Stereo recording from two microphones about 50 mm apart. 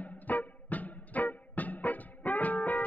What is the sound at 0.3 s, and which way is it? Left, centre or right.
Music, left.